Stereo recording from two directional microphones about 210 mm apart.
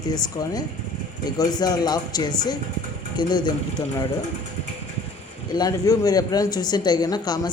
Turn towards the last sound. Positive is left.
turn(degrees=20)  # may be behind; listen again after turning